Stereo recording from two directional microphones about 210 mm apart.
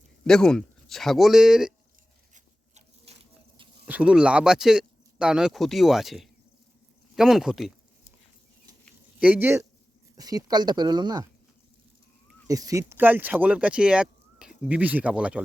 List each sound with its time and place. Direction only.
0.3 s speech: 5° left (ahead or behind)
2.3 s a sound: 30° right (ahead or behind)
3.8 s speech: 5° right (ahead or behind)
9.2 s speech: 10° right (ahead or behind)
12.5 s speech: 15° right (ahead or behind)